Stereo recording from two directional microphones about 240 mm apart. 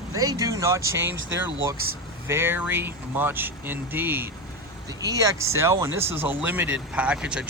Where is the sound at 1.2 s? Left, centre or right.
Right.